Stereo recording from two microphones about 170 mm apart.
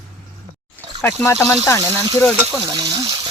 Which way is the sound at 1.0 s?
15° left (ahead or behind).